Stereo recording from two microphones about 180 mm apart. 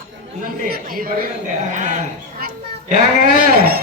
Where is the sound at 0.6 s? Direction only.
55° right (ahead or behind).